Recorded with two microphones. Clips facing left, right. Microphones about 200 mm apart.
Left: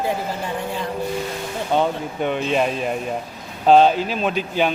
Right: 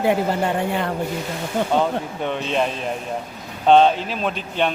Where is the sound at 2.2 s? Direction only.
5° left (ahead or behind).